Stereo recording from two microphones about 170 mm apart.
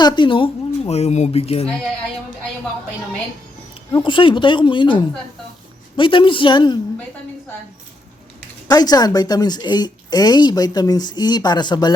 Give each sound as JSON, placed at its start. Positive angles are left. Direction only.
{"t": 0.0, "sound": "speech", "side_deg": 30}
{"t": 3.9, "sound": "a woman's voice", "side_deg": 30}
{"t": 8.6, "sound": "a woman's voice", "side_deg": 25}